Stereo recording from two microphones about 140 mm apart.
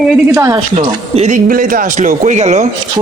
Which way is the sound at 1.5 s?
90° right.